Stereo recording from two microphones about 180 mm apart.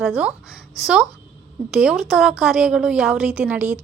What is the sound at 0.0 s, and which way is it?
A woman's voice, 5° right (ahead or behind).